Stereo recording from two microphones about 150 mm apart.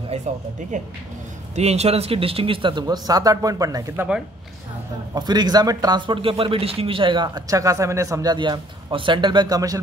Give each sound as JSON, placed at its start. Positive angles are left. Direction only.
{"t": 1.5, "sound": "speech", "side_deg": -45}
{"t": 3.9, "sound": "speech", "side_deg": -10}
{"t": 5.1, "sound": "a man's voice", "side_deg": -25}